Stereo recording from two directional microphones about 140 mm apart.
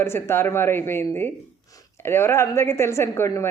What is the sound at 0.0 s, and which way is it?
A woman's voice, 15° left (ahead or behind).